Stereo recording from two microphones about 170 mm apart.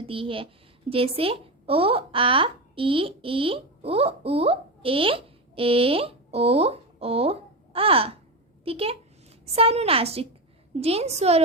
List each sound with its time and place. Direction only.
0.1 s a woman's voice: 30° right (ahead or behind)